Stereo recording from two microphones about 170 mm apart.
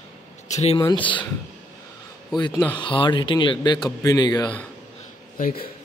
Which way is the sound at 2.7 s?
30° left (ahead or behind).